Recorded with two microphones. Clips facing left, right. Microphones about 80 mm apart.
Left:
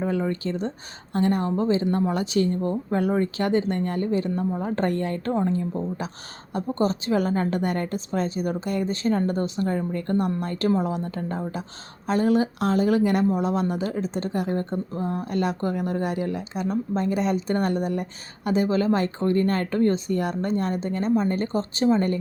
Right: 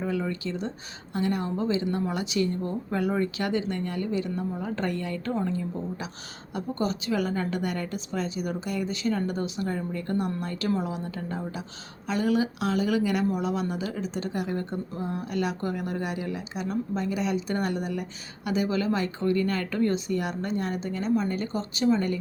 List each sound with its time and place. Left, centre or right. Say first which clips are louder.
0.0 s speech: left 4 dB; left